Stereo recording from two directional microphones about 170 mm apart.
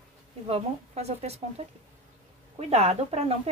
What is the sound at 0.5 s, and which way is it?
A woman's voice, 35° right (ahead or behind).